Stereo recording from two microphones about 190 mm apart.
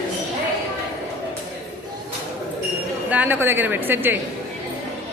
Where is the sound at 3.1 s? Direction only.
10° right (ahead or behind).